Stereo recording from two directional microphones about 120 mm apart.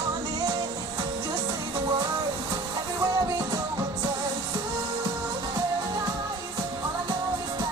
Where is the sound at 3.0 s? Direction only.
30° right (ahead or behind).